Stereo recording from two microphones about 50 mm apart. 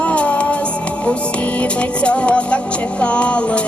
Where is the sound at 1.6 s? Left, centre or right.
Left.